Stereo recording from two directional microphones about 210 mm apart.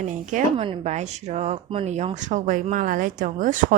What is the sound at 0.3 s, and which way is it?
Speech, 35° right (ahead or behind).